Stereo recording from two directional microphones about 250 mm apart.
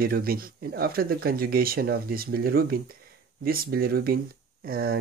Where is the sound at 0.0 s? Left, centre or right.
Right.